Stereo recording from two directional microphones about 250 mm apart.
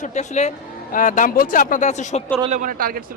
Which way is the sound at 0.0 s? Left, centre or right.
Left.